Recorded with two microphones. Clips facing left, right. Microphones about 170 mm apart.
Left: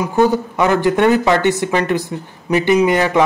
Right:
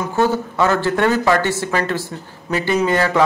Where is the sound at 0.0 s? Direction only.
15° left (ahead or behind).